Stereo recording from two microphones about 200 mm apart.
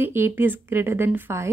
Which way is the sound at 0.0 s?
10° right (ahead or behind).